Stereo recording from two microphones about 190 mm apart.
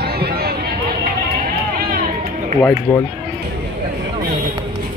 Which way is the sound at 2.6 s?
15° left (ahead or behind).